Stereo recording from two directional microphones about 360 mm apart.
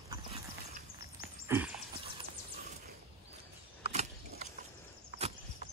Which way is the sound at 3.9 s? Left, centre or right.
Centre.